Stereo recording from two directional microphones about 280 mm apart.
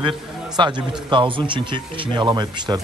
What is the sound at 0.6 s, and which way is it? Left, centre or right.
Speech, centre.